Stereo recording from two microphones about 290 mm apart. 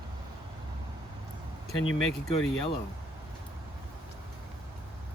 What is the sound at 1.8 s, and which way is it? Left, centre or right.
Speech, left.